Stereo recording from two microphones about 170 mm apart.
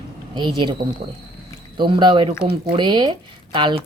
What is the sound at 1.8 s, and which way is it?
Speech, 30° right (ahead or behind).